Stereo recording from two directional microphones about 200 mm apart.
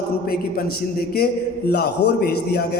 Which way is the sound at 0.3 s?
50° left (ahead or behind).